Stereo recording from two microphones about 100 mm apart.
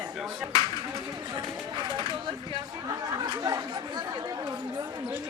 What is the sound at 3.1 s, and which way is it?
Chatter, 40° right (ahead or behind).